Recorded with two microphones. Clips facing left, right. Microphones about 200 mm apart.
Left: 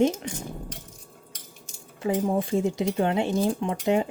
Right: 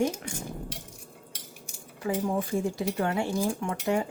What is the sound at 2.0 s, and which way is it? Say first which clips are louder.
Speech: left 4 dB; 25° left (ahead or behind).